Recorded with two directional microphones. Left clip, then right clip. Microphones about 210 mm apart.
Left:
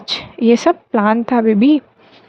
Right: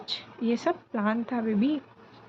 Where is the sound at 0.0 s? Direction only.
45° left (ahead or behind).